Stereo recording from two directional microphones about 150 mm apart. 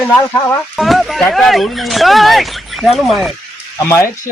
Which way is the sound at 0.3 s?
15° left (ahead or behind).